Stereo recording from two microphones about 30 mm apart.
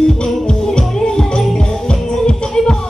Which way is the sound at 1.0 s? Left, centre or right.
Left.